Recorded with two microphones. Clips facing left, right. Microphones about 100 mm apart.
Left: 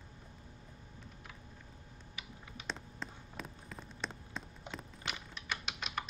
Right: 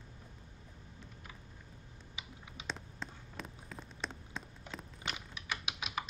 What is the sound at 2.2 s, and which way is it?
Typing, 20° right (ahead or behind).